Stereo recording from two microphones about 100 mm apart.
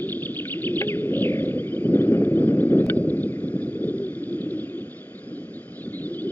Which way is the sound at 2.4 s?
15° left (ahead or behind).